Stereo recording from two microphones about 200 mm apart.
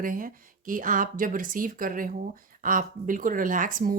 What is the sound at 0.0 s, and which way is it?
A woman's voice, 45° right (ahead or behind).